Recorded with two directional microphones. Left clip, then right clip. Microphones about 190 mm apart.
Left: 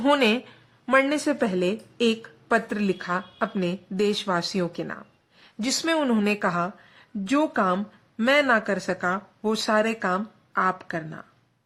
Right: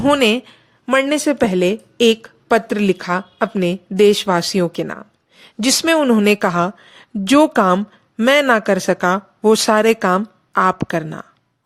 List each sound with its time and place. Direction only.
0.0 s a woman's voice: 30° right (ahead or behind); by 11.3 s 50° right (ahead or behind)